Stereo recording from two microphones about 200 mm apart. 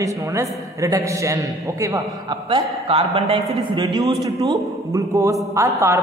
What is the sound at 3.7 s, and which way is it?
A man's voice, 20° right (ahead or behind).